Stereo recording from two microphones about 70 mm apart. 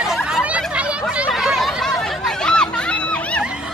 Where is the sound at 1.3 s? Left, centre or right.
Centre.